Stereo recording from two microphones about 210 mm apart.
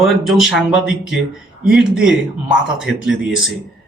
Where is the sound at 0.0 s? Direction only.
Centre (ahead or behind).